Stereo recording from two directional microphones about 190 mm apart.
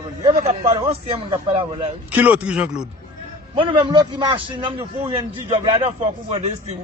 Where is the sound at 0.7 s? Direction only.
30° right (ahead or behind).